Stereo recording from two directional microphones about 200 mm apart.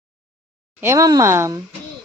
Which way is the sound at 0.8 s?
15° right (ahead or behind).